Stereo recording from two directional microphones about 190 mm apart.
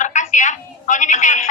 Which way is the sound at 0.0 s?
40° left (ahead or behind).